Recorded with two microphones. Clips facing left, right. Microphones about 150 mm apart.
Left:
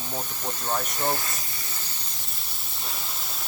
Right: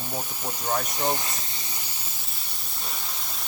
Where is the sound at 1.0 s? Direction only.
15° right (ahead or behind).